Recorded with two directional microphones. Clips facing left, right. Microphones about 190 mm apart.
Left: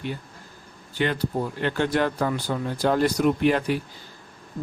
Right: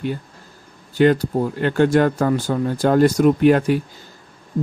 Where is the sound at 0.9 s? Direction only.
45° right (ahead or behind).